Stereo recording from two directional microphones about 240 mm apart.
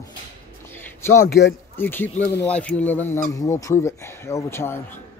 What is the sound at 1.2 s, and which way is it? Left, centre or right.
Speech, left.